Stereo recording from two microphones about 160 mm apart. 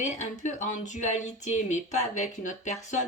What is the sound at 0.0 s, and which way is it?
Speech, 50° left (ahead or behind).